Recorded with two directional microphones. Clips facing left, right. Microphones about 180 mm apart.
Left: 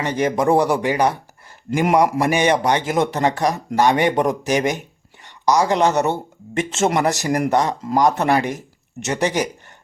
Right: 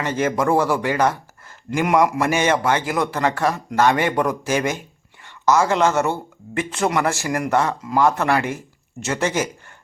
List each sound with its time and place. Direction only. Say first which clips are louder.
0.0 s speech: left 2 dB; 15° left (ahead or behind)